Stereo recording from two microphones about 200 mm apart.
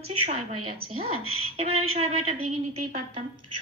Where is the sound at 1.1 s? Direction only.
90° right.